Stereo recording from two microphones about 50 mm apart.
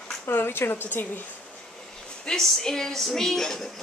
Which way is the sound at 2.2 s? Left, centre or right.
Centre.